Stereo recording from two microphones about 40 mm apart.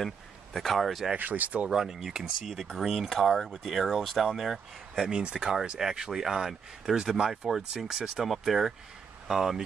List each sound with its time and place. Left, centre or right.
0.0 s speech: centre
1.1 s speech: right
1.7 s speech: centre
3.1 s speech: centre
5.0 s speech: centre